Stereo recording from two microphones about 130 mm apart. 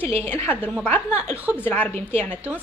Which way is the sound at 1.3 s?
10° right (ahead or behind).